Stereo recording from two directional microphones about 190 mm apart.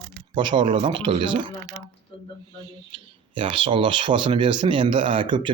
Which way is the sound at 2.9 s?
25° right (ahead or behind).